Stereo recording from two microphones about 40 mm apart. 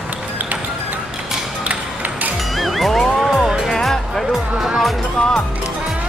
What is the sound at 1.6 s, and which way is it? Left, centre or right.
Music, right.